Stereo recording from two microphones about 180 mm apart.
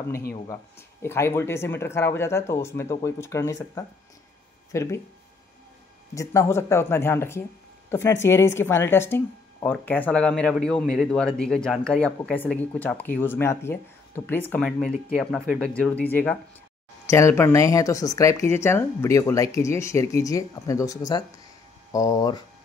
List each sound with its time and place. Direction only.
0.5 s speech: 15° left (ahead or behind)
6.1 s speech: 15° left (ahead or behind)